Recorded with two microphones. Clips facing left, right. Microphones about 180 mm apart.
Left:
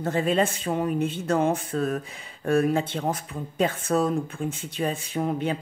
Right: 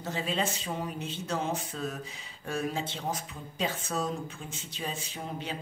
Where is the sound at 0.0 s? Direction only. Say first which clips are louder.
Left 9 dB; 55° left (ahead or behind).